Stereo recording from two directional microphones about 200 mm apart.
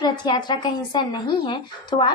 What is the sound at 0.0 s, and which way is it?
Speech, 20° left (ahead or behind).